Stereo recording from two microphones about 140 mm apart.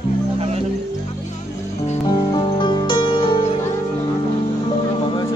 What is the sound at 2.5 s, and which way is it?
Music, 35° left (ahead or behind).